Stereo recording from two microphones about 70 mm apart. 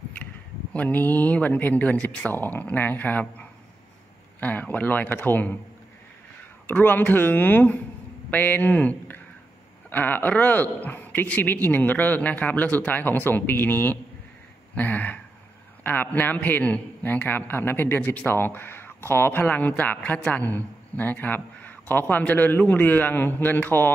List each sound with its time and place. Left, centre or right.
0.7 s a man's voice: left
6.7 s a man's voice: left